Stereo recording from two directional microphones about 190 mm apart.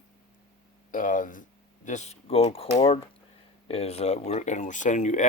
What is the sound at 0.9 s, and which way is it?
Speech, 45° left (ahead or behind).